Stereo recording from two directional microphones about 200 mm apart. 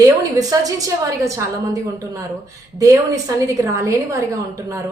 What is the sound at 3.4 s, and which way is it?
A woman's voice, 15° right (ahead or behind).